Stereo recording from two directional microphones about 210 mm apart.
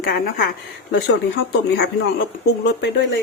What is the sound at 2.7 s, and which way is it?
Speech, 55° left (ahead or behind).